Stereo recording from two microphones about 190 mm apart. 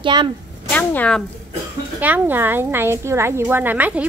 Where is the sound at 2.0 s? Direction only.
10° right (ahead or behind).